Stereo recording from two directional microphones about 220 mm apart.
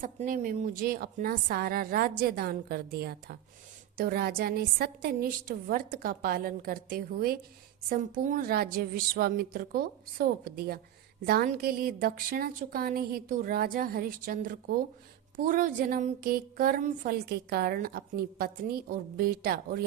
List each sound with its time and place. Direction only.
0.0 s a woman's voice: 35° right (ahead or behind)